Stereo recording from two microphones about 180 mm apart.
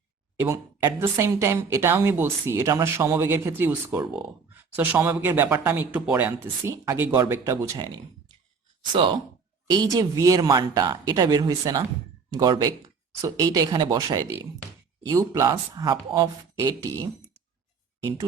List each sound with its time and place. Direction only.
0.3 s speech: 15° right (ahead or behind)